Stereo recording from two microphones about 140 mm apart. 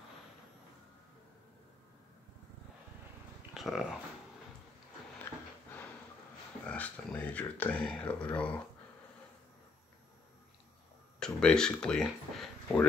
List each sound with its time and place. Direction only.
3.5 s dog: centre (ahead or behind)
5.3 s a sound: 15° left (ahead or behind)
6.6 s speech: 10° left (ahead or behind)
11.1 s speech: 5° left (ahead or behind)